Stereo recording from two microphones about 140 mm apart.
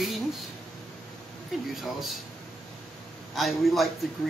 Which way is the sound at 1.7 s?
Centre (ahead or behind).